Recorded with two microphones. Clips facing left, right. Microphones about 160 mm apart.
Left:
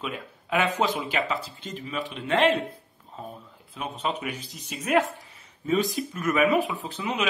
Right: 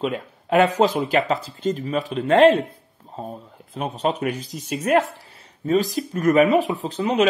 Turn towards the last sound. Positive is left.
turn(degrees=-40)  # may be behind; listen again after turning